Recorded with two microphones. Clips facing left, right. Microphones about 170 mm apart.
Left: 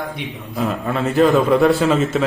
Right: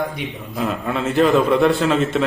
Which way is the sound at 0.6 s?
Centre (ahead or behind).